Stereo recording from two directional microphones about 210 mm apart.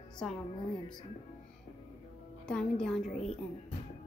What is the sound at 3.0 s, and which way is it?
Speech, 30° left (ahead or behind).